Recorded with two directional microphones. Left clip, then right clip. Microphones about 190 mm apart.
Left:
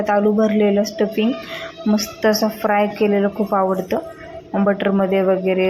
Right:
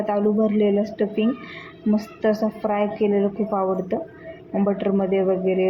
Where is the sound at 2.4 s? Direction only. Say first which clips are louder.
Left 5 dB; 20° left (ahead or behind).